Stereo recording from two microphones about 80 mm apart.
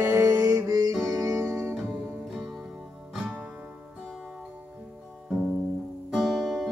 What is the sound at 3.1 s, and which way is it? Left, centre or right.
Music, centre.